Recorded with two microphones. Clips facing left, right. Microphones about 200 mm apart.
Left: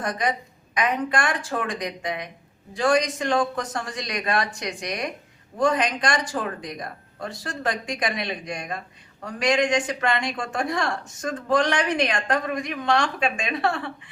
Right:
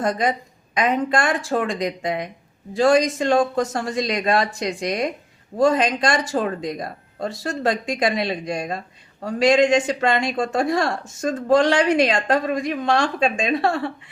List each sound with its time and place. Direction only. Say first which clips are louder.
0.0 s speech: right 5 dB; 25° right (ahead or behind)